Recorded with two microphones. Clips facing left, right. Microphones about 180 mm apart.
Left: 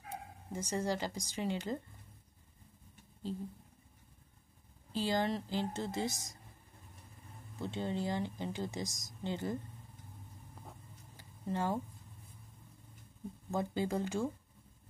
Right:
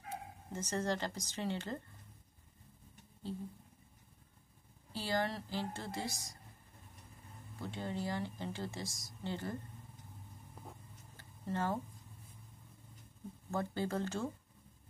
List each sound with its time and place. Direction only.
0.5 s speech: 10° left (ahead or behind)
4.9 s speech: 20° left (ahead or behind)
7.6 s speech: 20° left (ahead or behind)
11.1 s a sound: 15° left (ahead or behind)
13.5 s speech: 15° left (ahead or behind)